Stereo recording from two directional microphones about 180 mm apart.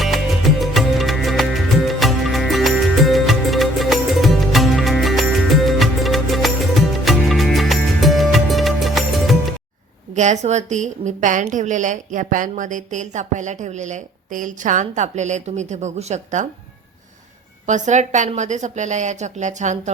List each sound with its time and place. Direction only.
0.0 s music: centre (ahead or behind)
10.2 s a woman's voice: 40° right (ahead or behind)
17.7 s a woman's voice: 40° right (ahead or behind)